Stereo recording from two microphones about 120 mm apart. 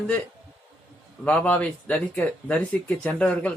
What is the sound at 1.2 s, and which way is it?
Speech, 10° left (ahead or behind).